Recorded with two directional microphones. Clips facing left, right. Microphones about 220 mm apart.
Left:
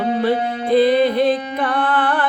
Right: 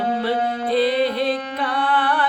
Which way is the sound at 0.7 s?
50° left (ahead or behind).